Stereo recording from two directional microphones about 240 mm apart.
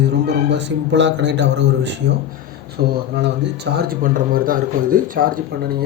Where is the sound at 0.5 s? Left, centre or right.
Right.